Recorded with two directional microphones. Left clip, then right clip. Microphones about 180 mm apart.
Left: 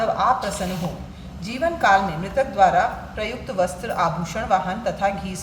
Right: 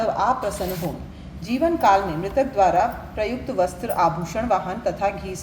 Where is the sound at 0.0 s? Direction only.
40° right (ahead or behind).